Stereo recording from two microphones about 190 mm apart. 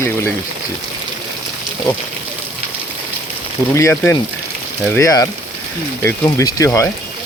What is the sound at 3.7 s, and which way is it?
Speech, 15° left (ahead or behind).